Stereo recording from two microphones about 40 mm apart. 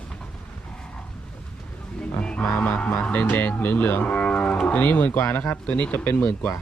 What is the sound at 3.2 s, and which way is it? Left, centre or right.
Speech, left.